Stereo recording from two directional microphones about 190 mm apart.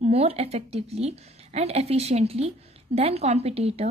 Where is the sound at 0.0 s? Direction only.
35° right (ahead or behind).